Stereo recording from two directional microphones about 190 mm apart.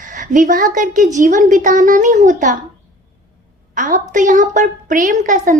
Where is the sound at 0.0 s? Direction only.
45° right (ahead or behind).